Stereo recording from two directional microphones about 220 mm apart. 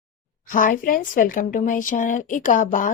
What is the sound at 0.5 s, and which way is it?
Speech, 40° left (ahead or behind).